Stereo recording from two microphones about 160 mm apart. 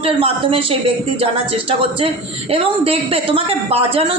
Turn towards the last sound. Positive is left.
turn(degrees=-35)  # may be behind; listen again after turning